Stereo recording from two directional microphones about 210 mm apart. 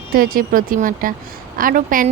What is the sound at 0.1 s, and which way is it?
A woman's voice, 45° right (ahead or behind).